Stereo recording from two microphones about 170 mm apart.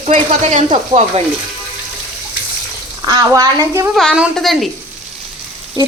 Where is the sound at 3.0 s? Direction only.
20° right (ahead or behind).